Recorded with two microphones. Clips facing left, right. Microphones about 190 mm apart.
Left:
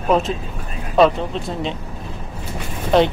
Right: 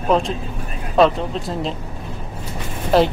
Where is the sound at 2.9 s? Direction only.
5° right (ahead or behind).